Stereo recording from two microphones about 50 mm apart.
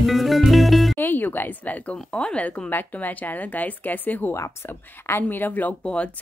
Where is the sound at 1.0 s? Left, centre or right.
Left.